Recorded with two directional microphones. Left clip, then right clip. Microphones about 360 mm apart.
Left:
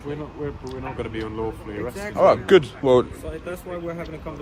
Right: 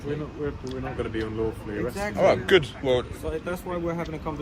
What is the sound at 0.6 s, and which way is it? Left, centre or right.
Speech, centre.